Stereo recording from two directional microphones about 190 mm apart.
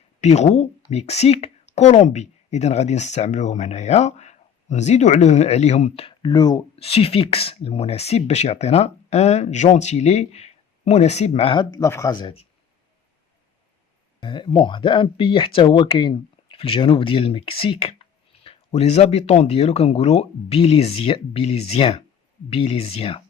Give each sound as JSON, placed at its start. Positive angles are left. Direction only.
{"t": 0.2, "sound": "speech", "side_deg": 35}
{"t": 6.0, "sound": "speech", "side_deg": 25}
{"t": 14.2, "sound": "speech", "side_deg": 25}